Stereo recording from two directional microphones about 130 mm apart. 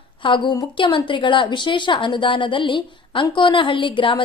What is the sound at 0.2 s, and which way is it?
A woman's voice, 40° left (ahead or behind).